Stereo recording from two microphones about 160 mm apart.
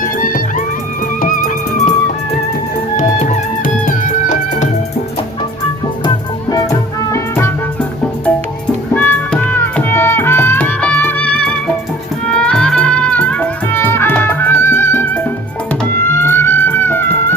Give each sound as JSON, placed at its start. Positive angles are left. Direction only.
{"t": 0.0, "sound": "music", "side_deg": 60}
{"t": 3.0, "sound": "music", "side_deg": 55}
{"t": 6.1, "sound": "music", "side_deg": 25}
{"t": 8.9, "sound": "music", "side_deg": 10}